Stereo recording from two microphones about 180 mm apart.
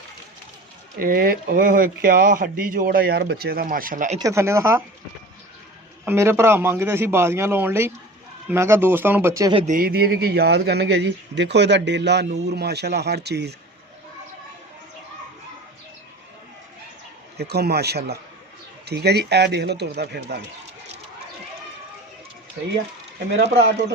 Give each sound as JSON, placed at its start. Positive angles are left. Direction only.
{"t": 0.9, "sound": "speech", "side_deg": -55}
{"t": 4.2, "sound": "a man's voice", "side_deg": -15}
{"t": 6.1, "sound": "a man's voice", "side_deg": -15}
{"t": 9.6, "sound": "speech", "side_deg": -50}
{"t": 17.3, "sound": "speech", "side_deg": -65}
{"t": 23.3, "sound": "speech", "side_deg": -80}